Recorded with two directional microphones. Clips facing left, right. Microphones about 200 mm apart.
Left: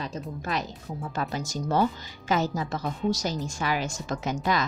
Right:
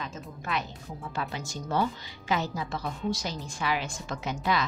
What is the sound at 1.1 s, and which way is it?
A woman's voice, 40° left (ahead or behind).